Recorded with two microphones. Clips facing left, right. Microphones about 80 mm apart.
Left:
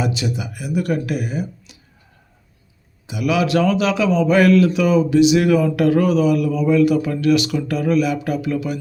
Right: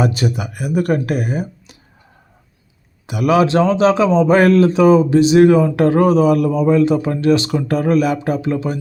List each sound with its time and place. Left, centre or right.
0.0 s speech: right
3.1 s speech: right